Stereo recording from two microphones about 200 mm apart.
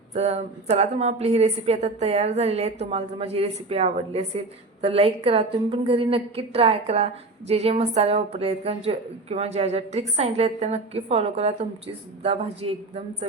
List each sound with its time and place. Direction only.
0.1 s a woman's voice: 35° right (ahead or behind)